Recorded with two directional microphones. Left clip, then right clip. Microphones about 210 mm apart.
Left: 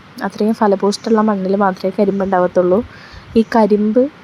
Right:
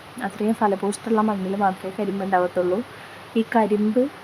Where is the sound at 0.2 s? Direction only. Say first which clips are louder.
Left 6 dB; 15° left (ahead or behind).